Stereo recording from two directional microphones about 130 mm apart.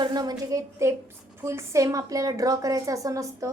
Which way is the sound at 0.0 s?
35° right (ahead or behind).